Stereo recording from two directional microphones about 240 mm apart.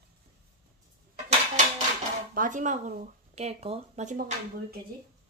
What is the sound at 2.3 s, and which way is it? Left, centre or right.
A woman's voice, right.